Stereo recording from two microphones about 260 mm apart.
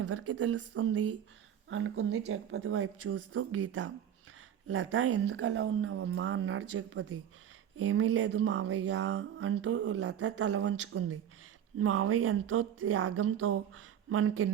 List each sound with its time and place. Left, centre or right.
0.0 s speech: right
8.7 s a sound: right
9.0 s speech: right